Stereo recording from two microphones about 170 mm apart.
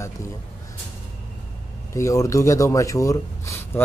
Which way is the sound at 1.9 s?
15° left (ahead or behind).